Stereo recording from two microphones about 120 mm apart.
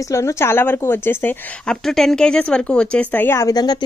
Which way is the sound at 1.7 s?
5° left (ahead or behind).